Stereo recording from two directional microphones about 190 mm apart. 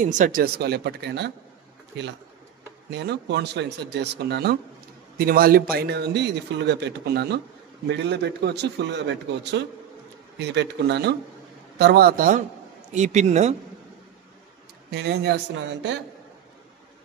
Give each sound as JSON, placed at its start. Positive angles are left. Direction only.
{"t": 0.0, "sound": "a man's voice", "side_deg": -45}
{"t": 2.9, "sound": "a man's voice", "side_deg": -65}
{"t": 12.9, "sound": "speech", "side_deg": -40}
{"t": 14.9, "sound": "a man's voice", "side_deg": -60}